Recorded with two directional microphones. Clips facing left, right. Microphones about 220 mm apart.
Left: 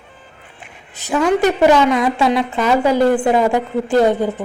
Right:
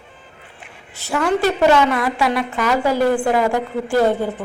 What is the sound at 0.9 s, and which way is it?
A woman's voice, 15° left (ahead or behind).